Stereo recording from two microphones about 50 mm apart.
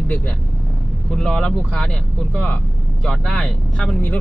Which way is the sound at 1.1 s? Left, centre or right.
Centre.